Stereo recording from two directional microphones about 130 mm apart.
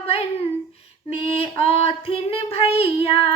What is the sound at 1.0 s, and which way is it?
Female singing, 45° left (ahead or behind).